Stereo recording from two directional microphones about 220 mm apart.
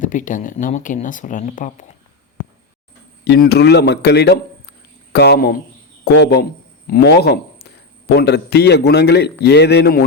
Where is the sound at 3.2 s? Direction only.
50° left (ahead or behind).